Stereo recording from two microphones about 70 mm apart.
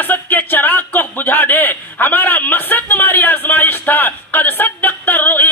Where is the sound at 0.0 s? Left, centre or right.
Left.